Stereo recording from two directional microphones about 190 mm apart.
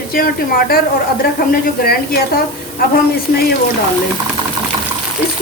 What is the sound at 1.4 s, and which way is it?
Speech, 55° left (ahead or behind).